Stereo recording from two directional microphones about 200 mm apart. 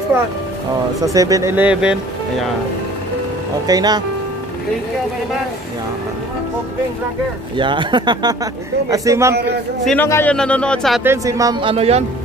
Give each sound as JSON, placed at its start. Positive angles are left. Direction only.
{"t": 1.0, "sound": "speech", "side_deg": -15}
{"t": 3.6, "sound": "speech", "side_deg": -20}
{"t": 7.5, "sound": "speech", "side_deg": -25}
{"t": 9.8, "sound": "a man's voice", "side_deg": 10}
{"t": 11.1, "sound": "speech", "side_deg": -15}
{"t": 11.7, "sound": "speech", "side_deg": -30}